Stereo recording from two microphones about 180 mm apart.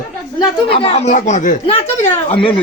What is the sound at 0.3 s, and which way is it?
Speech, 30° left (ahead or behind).